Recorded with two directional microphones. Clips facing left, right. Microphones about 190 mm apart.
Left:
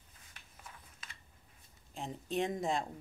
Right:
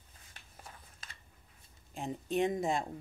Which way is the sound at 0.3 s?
35° right (ahead or behind).